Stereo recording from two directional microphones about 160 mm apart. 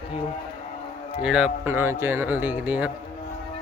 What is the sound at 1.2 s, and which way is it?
A man's voice, 5° right (ahead or behind).